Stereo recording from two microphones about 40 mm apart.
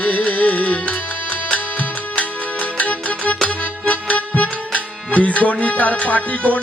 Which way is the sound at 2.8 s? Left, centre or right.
Left.